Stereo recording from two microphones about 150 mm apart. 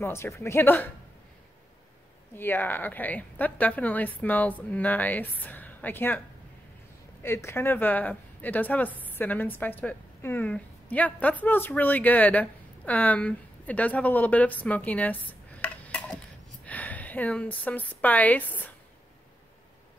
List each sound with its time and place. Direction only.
0.0 s a woman's voice: 20° left (ahead or behind)
2.3 s a woman's voice: 15° left (ahead or behind)
7.2 s a woman's voice: 15° left (ahead or behind)